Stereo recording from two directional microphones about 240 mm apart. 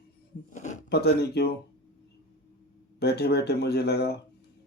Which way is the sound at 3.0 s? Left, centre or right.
Left.